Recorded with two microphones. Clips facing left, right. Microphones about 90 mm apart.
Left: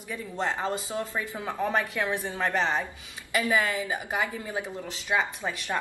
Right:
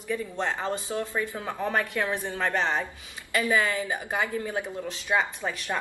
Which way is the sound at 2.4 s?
5° left (ahead or behind).